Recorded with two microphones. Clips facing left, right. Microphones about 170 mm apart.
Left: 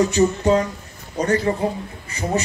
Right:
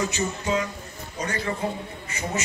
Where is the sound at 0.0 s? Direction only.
40° left (ahead or behind).